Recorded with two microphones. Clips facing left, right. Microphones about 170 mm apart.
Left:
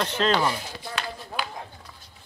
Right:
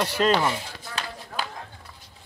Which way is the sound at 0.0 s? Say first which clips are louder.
Right 1 dB; 10° right (ahead or behind).